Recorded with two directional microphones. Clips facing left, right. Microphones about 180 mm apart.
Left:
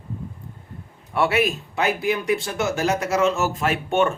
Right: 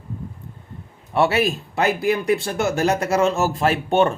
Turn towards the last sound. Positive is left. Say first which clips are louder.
# right 3 dB
turn(degrees=-30)  # may be behind; listen again after turning